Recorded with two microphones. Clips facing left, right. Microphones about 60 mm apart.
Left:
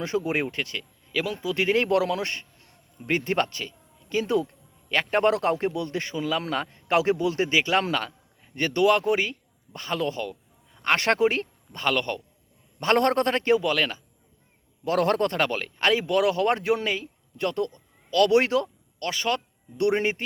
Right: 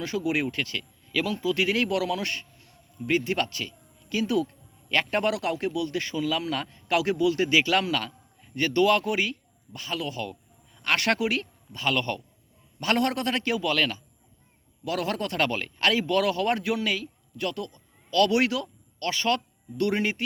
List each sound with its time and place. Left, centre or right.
0.0 s a man's voice: left
11.9 s speech: left
12.8 s a man's voice: left
14.8 s speech: left
15.4 s speech: left
19.1 s speech: left